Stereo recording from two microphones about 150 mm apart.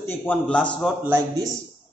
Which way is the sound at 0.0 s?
15° left (ahead or behind).